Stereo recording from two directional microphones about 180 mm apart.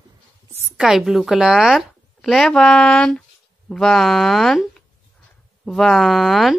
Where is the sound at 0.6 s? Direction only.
5° right (ahead or behind).